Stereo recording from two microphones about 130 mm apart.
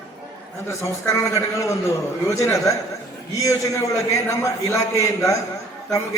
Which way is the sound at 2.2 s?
25° left (ahead or behind).